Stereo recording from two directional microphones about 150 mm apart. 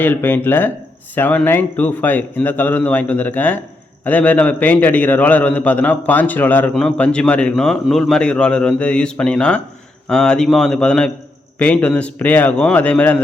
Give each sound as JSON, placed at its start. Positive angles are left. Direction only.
{"t": 0.0, "sound": "a man's voice", "side_deg": 15}